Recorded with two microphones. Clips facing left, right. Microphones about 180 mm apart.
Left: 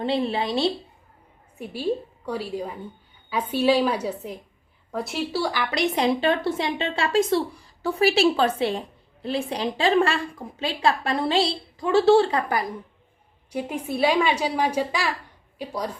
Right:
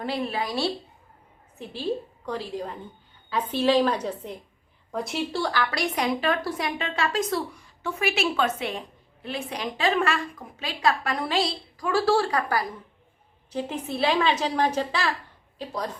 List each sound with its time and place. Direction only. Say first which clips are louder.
0.0 s a woman's voice: left 4 dB; 25° left (ahead or behind)
1.5 s a woman's voice: left 3 dB; 10° left (ahead or behind)
5.7 s a woman's voice: left 4 dB; 25° left (ahead or behind)